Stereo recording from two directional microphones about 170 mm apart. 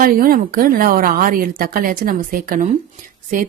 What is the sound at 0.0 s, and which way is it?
A woman's voice, 55° right (ahead or behind).